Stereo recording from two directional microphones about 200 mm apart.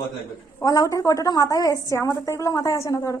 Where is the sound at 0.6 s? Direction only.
15° left (ahead or behind).